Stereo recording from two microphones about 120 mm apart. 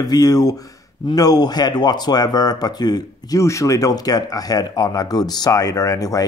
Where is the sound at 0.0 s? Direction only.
30° left (ahead or behind).